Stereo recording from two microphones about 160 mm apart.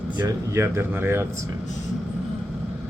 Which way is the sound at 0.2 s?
20° right (ahead or behind).